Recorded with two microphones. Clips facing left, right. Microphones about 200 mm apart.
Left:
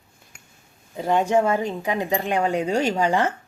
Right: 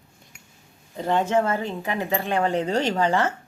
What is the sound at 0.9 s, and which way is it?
Speech, 10° left (ahead or behind).